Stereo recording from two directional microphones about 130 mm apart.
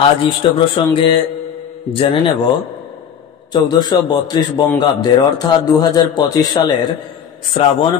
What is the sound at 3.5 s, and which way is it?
A man's voice, 35° left (ahead or behind).